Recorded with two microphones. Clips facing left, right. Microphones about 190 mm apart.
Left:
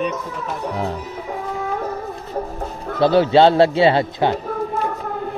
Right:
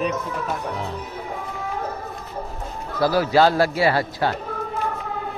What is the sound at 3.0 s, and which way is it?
A man's voice, 25° left (ahead or behind).